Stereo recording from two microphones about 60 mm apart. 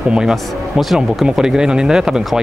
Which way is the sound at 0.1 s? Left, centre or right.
Centre.